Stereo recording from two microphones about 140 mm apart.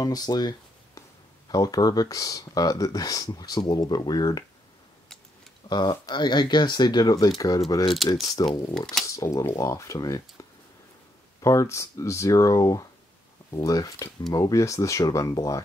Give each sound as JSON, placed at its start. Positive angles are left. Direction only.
{"t": 0.0, "sound": "a sound", "side_deg": 30}
{"t": 1.5, "sound": "speech", "side_deg": 25}
{"t": 5.7, "sound": "speech", "side_deg": 30}
{"t": 8.7, "sound": "speech", "side_deg": 5}
{"t": 9.0, "sound": "speech", "side_deg": 25}
{"t": 11.4, "sound": "speech", "side_deg": 20}